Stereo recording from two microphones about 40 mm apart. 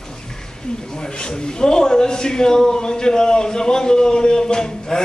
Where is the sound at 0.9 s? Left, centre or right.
Left.